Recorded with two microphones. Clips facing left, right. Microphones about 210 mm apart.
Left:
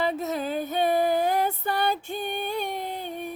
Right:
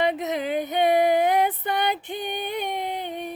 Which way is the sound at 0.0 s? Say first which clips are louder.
Right 2 dB; 15° right (ahead or behind).